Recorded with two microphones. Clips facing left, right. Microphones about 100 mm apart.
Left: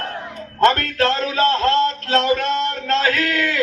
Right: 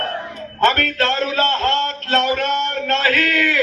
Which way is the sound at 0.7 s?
30° left (ahead or behind).